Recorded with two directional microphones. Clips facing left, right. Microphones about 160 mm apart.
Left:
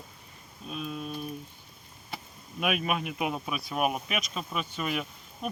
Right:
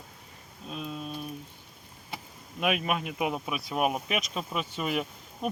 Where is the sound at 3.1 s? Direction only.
15° right (ahead or behind).